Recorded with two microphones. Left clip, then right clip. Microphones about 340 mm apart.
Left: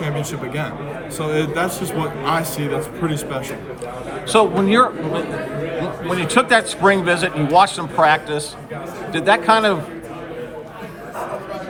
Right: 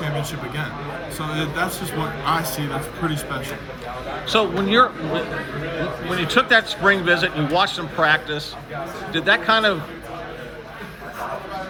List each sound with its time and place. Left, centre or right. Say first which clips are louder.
0.0 s a man's voice: left 2 dB; centre
4.3 s a man's voice: left 4 dB; centre